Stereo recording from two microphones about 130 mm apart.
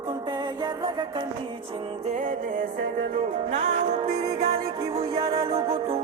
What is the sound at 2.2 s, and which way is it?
Music, 80° right.